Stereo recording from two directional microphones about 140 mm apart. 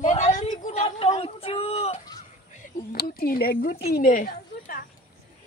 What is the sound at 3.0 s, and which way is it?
A woman's voice, 90° left.